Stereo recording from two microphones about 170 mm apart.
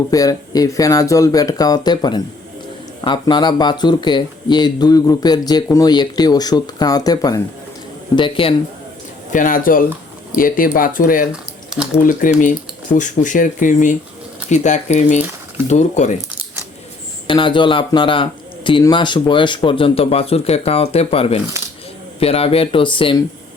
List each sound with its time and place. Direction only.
0.1 s speech: 20° left (ahead or behind)
9.3 s speech: 50° left (ahead or behind)
11.3 s typing: 5° right (ahead or behind)
12.0 s speech: 50° left (ahead or behind)
17.2 s speech: 30° left (ahead or behind)